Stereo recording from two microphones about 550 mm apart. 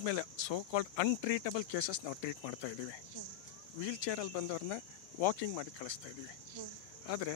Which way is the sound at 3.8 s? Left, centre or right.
Left.